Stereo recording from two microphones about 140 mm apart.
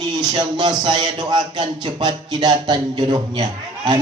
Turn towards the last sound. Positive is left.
turn(degrees=-30)  # may be behind; listen again after turning